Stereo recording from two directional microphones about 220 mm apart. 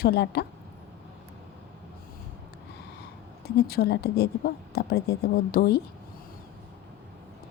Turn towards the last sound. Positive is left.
turn(degrees=45)  # may be behind; listen again after turning